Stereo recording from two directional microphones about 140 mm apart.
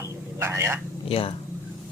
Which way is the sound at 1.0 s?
45° left (ahead or behind).